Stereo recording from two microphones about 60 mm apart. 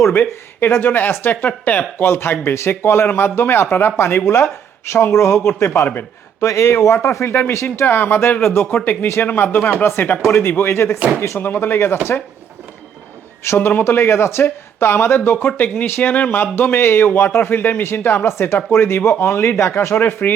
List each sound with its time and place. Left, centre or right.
0.1 s speech: left
2.0 s speech: left
3.9 s speech: left
7.9 s speech: left
8.4 s speech: left
8.8 s speech: left
10.2 s speech: left
11.3 s speech: left
13.4 s speech: left